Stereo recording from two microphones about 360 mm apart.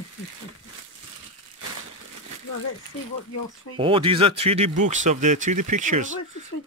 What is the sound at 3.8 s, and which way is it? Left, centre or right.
Speech, centre.